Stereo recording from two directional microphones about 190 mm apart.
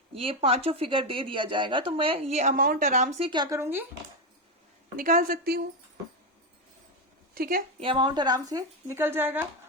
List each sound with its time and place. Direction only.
0.1 s speech: 30° right (ahead or behind); by 3.8 s 10° right (ahead or behind)
4.9 s a woman's voice: 50° right (ahead or behind)
7.3 s a woman's voice: 50° right (ahead or behind)
7.8 s speech: 25° right (ahead or behind); by 9.5 s 10° right (ahead or behind)